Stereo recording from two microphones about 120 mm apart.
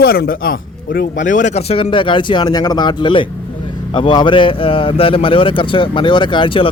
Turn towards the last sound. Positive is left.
turn(degrees=50)  # may be behind; listen again after turning